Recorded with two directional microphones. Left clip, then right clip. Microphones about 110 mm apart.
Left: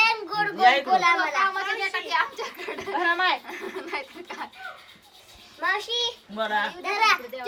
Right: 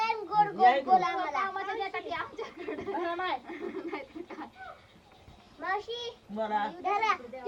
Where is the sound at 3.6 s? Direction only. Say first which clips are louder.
Left 6 dB; 35° left (ahead or behind).